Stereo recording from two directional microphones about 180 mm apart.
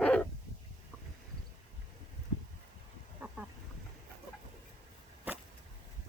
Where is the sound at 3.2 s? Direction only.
10° right (ahead or behind).